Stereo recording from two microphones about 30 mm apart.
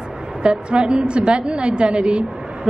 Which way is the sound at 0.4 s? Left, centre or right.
Right.